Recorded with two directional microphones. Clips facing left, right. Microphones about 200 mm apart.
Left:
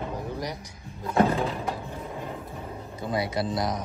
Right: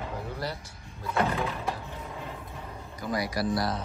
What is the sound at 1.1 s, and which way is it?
Speech, 25° left (ahead or behind).